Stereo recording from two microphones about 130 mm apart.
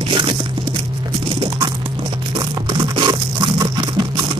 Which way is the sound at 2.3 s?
35° right (ahead or behind).